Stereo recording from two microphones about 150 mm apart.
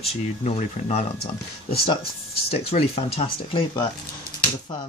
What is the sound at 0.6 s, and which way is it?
Speech, 45° left (ahead or behind).